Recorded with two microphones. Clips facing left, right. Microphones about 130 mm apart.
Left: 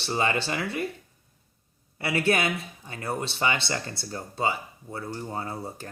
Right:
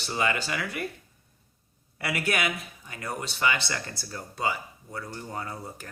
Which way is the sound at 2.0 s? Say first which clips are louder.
Left 4 dB; 25° left (ahead or behind).